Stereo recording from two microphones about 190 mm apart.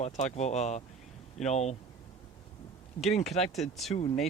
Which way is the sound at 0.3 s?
35° left (ahead or behind).